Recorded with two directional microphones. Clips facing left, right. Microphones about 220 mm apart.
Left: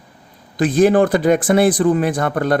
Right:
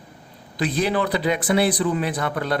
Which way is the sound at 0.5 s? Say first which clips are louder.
Left 9 dB; 50° left (ahead or behind).